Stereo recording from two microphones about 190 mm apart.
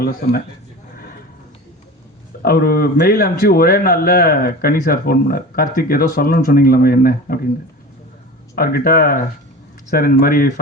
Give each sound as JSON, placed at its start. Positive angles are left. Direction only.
{"t": 2.4, "sound": "speech", "side_deg": 50}
{"t": 8.5, "sound": "speech", "side_deg": 50}